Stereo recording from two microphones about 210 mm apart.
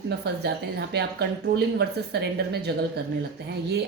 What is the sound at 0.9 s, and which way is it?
Speech, 50° right (ahead or behind).